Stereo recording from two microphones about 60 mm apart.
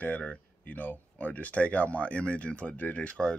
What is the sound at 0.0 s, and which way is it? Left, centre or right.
Speech, left.